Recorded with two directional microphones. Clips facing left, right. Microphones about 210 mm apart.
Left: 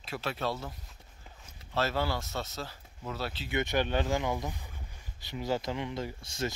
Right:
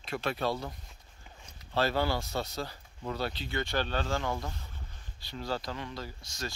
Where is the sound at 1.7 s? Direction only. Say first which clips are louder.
Right 2 dB; centre (ahead or behind).